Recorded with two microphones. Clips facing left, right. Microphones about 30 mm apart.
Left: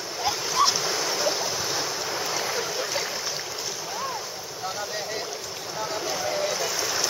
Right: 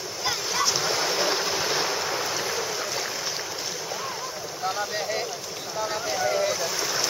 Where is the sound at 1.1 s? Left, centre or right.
Right.